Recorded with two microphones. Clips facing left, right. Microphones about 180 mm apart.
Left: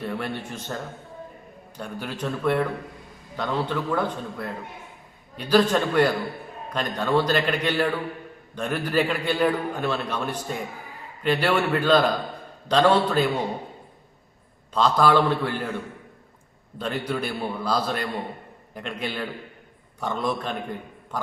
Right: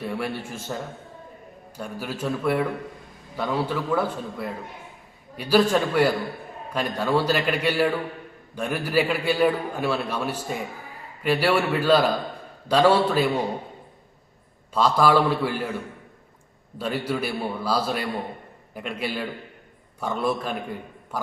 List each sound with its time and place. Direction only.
0.0 s a man's voice: 10° right (ahead or behind)
1.8 s a man's voice: 5° right (ahead or behind)
14.7 s a man's voice: 10° right (ahead or behind)
16.7 s a man's voice: 10° right (ahead or behind)